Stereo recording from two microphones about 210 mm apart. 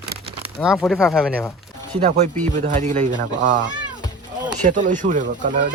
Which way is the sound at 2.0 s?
35° right (ahead or behind).